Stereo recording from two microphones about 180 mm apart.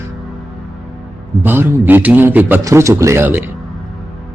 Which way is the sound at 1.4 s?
10° right (ahead or behind).